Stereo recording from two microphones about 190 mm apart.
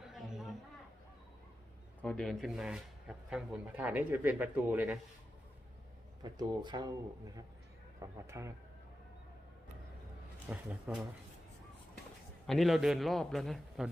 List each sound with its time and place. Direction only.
0.0 s a sound: centre (ahead or behind)
2.0 s a man's voice: 5° left (ahead or behind)
6.2 s speech: 25° right (ahead or behind)
7.9 s speech: 15° right (ahead or behind)
10.5 s a man's voice: 5° right (ahead or behind)
12.5 s a man's voice: centre (ahead or behind)